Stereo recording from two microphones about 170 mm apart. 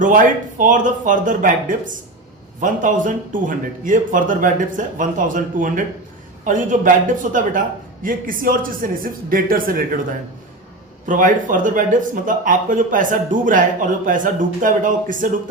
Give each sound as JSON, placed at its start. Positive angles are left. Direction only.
{"t": 0.0, "sound": "a man's voice", "side_deg": -50}
{"t": 11.1, "sound": "speech", "side_deg": -50}